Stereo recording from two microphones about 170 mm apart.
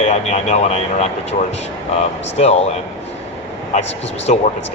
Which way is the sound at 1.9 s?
40° left (ahead or behind).